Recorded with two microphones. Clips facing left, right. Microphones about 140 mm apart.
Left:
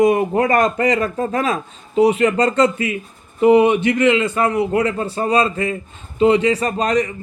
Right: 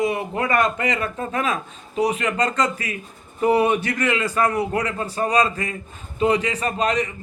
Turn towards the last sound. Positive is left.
turn(degrees=40)  # may be behind; listen again after turning